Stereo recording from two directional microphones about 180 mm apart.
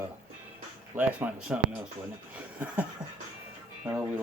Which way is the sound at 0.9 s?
5° right (ahead or behind).